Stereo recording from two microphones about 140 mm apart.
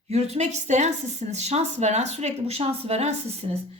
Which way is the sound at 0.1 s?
55° right (ahead or behind).